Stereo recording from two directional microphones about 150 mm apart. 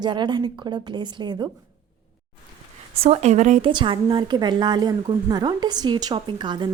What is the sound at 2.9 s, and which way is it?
Speech, 45° right (ahead or behind).